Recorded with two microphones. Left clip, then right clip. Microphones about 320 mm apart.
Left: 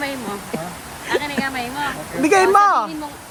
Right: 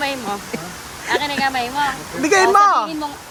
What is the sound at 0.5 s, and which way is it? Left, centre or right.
Speech, centre.